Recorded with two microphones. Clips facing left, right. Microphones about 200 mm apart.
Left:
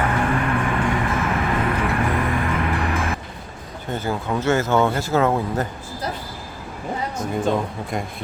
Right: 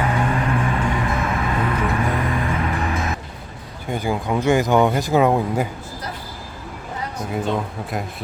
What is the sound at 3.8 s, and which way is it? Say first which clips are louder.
Speech: right 2 dB; 15° right (ahead or behind).